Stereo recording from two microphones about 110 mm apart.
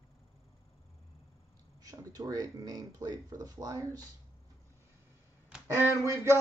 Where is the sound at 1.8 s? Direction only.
35° right (ahead or behind).